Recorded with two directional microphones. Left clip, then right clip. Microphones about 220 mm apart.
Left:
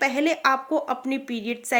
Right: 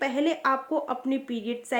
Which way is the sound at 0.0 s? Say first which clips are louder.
Left 4 dB; 35° left (ahead or behind).